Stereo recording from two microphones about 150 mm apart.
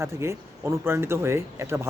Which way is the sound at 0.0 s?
15° right (ahead or behind).